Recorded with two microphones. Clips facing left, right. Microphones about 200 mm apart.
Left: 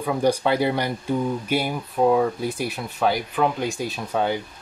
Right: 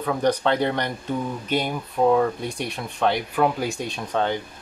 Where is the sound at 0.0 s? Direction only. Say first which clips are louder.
Left 1 dB; 10° left (ahead or behind).